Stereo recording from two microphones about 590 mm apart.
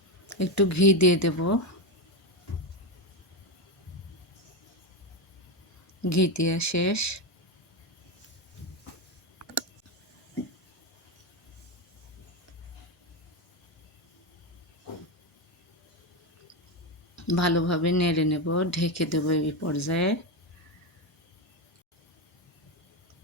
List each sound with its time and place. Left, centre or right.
0.3 s speech: left
6.0 s speech: left
17.2 s speech: left